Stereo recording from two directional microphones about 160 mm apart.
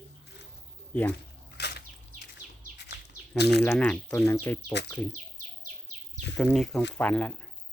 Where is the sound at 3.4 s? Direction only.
90° left.